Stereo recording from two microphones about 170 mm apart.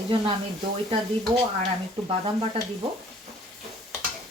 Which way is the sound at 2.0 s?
35° right (ahead or behind).